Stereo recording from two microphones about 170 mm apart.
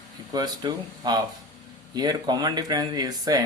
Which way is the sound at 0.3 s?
25° right (ahead or behind).